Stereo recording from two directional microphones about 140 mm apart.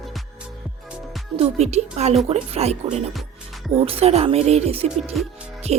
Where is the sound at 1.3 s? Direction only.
45° right (ahead or behind).